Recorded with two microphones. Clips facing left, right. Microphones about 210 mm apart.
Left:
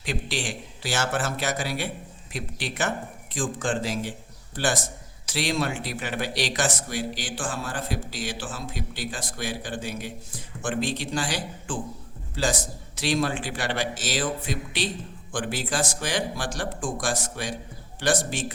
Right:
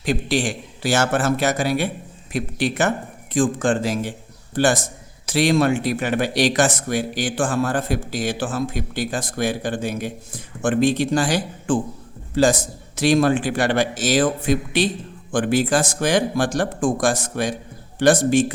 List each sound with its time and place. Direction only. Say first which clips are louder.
0.0 s a man's voice: right 9 dB; 45° right (ahead or behind)